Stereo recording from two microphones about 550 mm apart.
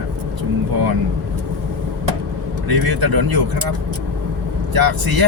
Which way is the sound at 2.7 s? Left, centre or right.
Right.